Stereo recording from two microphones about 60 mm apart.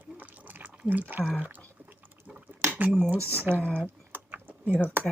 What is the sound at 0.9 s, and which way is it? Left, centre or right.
Speech, right.